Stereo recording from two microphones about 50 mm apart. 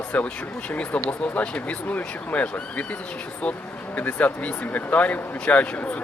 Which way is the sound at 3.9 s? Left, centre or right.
Left.